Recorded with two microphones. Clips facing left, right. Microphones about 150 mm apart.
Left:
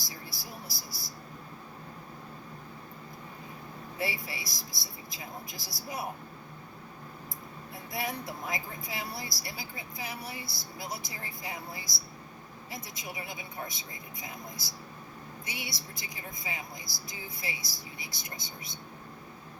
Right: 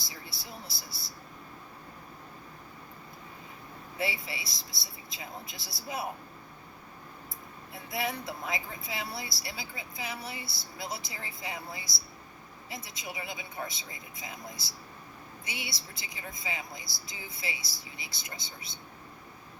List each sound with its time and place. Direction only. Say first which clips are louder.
0.0 s a sound: left 2 dB; 25° right (ahead or behind)
3.9 s speech: right 1 dB; 25° right (ahead or behind)
7.9 s speech: right 2 dB; 25° right (ahead or behind)